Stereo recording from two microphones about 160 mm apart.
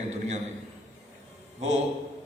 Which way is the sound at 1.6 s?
45° right (ahead or behind).